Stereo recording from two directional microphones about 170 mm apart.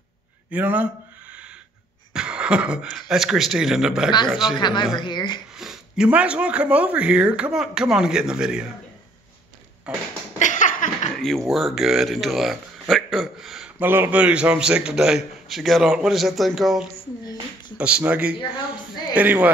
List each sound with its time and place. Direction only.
0.5 s speech: 10° right (ahead or behind)
2.1 s a man's voice: 5° right (ahead or behind)
4.6 s speech: 25° left (ahead or behind)
5.6 s speech: 5° right (ahead or behind)
9.9 s a man's voice: 5° right (ahead or behind)
10.4 s a sound: 50° left (ahead or behind)
11.1 s speech: 5° left (ahead or behind)
13.8 s a man's voice: 15° right (ahead or behind)
18.4 s speech: 30° left (ahead or behind)
19.1 s speech: 10° right (ahead or behind)